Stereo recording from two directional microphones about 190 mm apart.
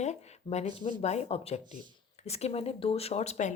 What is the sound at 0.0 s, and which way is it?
A woman's voice, 35° left (ahead or behind).